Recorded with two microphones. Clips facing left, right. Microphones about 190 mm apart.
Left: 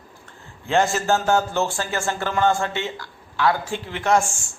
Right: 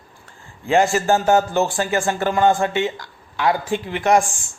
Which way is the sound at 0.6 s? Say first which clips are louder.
Right 3 dB; 15° right (ahead or behind).